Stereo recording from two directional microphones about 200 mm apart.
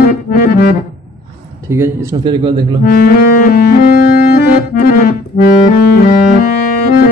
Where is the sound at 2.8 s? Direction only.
45° left (ahead or behind).